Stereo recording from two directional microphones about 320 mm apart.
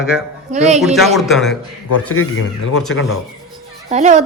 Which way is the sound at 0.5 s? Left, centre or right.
Right.